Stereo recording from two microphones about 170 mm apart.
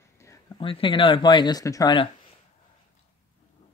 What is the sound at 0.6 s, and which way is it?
Speech, 30° left (ahead or behind).